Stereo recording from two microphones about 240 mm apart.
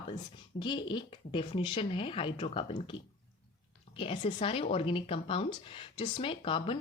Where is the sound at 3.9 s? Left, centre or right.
Left.